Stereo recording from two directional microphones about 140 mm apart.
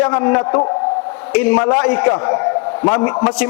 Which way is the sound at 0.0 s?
15° left (ahead or behind).